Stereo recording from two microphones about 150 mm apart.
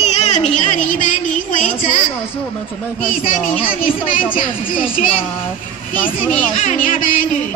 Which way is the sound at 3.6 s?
65° left (ahead or behind).